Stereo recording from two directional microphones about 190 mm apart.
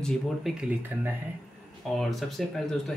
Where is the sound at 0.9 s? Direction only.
10° right (ahead or behind).